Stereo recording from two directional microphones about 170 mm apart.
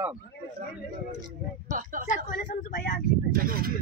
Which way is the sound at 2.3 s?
50° left (ahead or behind).